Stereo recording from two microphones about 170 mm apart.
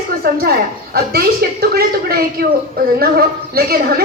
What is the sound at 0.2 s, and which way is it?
A woman's voice, 60° right (ahead or behind).